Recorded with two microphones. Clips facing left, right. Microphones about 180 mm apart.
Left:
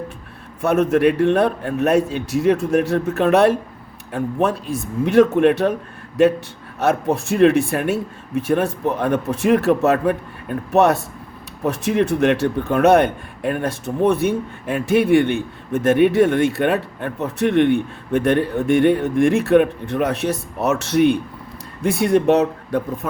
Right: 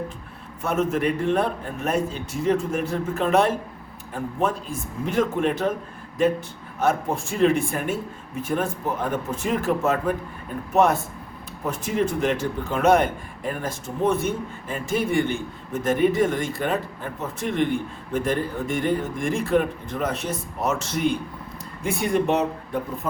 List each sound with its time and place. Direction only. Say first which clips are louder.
0.6 s speech: left 7 dB; 70° left (ahead or behind)
6.7 s speech: left 4 dB; 70° left (ahead or behind)